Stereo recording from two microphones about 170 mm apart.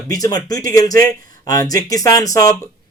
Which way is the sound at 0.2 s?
20° left (ahead or behind).